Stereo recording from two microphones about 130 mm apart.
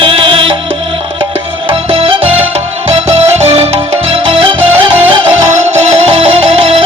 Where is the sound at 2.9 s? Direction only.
55° right (ahead or behind).